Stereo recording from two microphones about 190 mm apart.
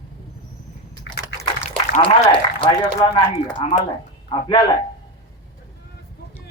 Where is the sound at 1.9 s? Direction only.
25° left (ahead or behind).